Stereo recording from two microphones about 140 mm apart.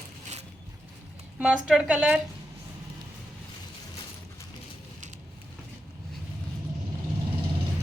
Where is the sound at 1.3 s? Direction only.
5° right (ahead or behind).